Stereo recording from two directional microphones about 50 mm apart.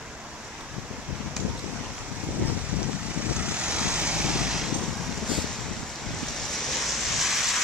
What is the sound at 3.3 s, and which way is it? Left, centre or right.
Vehicle, right.